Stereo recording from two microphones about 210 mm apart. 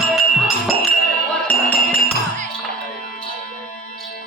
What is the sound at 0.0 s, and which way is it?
Music, centre (ahead or behind).